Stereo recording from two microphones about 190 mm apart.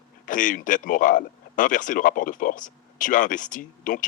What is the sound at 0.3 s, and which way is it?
Speech, 45° left (ahead or behind).